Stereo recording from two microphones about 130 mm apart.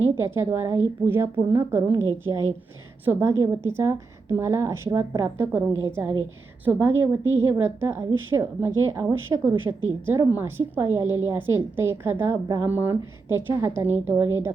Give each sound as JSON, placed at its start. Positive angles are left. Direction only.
{"t": 0.2, "sound": "a woman's voice", "side_deg": -20}
{"t": 5.5, "sound": "a woman's voice", "side_deg": -10}
{"t": 11.0, "sound": "a woman's voice", "side_deg": 30}
{"t": 11.3, "sound": "a woman's voice", "side_deg": -20}